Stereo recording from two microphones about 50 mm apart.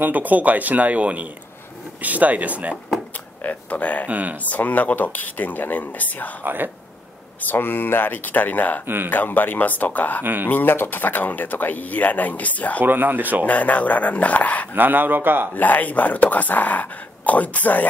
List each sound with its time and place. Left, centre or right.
0.0 s speech: right
3.4 s speech: left
4.1 s speech: right
4.5 s speech: left
6.4 s speech: right
7.4 s speech: left
8.8 s speech: right
9.1 s speech: left
10.2 s speech: right
10.5 s speech: left
12.8 s speech: right
13.5 s speech: left
14.8 s speech: right
15.5 s speech: left